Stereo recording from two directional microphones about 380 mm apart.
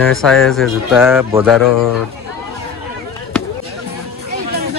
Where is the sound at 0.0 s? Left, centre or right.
Centre.